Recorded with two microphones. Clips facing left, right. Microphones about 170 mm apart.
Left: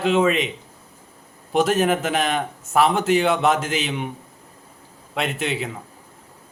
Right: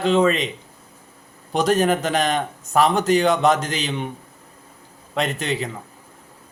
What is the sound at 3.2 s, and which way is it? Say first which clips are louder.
Speech: right 2 dB; 40° right (ahead or behind).